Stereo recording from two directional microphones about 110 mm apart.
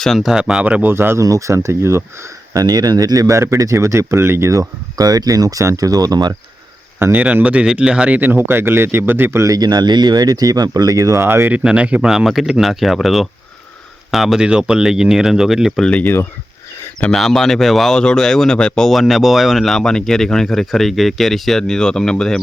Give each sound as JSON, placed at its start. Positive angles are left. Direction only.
{"t": 0.0, "sound": "speech", "side_deg": 0}
{"t": 2.5, "sound": "speech", "side_deg": -35}
{"t": 7.0, "sound": "speech", "side_deg": -15}
{"t": 15.8, "sound": "speech", "side_deg": 10}
{"t": 17.0, "sound": "speech", "side_deg": 5}